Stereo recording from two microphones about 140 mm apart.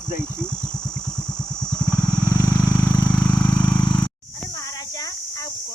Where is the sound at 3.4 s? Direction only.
30° left (ahead or behind).